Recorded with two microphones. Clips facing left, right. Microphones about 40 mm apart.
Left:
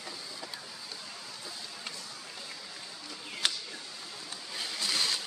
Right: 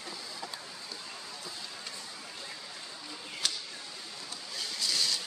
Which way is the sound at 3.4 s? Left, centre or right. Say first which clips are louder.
Left 3 dB; left.